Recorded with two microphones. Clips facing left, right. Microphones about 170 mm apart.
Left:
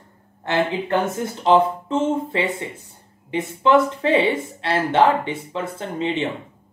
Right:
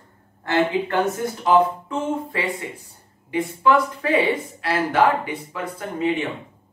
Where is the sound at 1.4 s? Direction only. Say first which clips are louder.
Left 1 dB; 25° left (ahead or behind).